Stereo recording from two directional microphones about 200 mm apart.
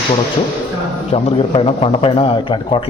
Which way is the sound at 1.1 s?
30° left (ahead or behind).